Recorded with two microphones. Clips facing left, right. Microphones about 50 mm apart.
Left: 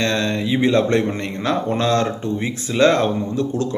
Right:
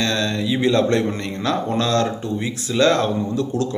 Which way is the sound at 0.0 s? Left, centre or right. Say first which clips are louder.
Left 1 dB; left.